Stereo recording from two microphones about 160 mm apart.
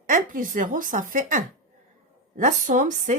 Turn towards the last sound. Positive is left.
turn(degrees=-50)  # may be behind; listen again after turning